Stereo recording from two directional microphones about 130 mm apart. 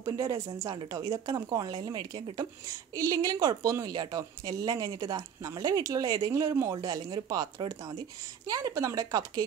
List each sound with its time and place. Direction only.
0.0 s a woman's voice: 25° right (ahead or behind)